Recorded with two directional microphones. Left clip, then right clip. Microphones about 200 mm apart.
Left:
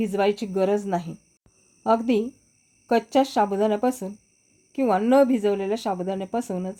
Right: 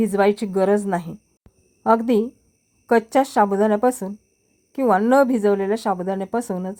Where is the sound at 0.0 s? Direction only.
20° right (ahead or behind).